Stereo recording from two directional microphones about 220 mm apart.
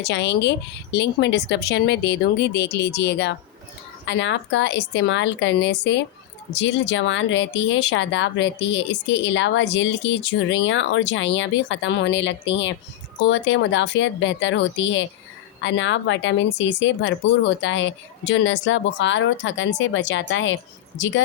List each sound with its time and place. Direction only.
0.0 s a woman's voice: 50° left (ahead or behind)